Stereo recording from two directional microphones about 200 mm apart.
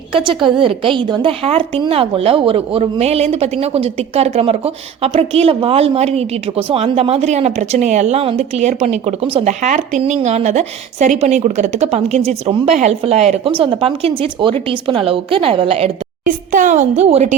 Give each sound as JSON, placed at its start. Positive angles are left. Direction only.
{"t": 0.1, "sound": "a woman's voice", "side_deg": -25}
{"t": 16.2, "sound": "a woman's voice", "side_deg": -40}